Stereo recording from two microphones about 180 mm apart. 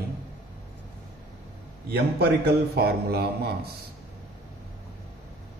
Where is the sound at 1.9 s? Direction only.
65° right (ahead or behind).